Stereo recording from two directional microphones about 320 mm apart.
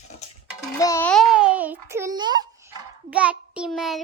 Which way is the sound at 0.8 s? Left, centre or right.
Centre.